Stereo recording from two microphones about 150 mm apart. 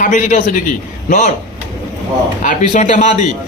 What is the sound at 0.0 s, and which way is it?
Speech, 55° left (ahead or behind).